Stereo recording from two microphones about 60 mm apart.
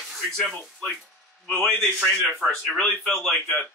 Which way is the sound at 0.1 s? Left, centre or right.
Centre.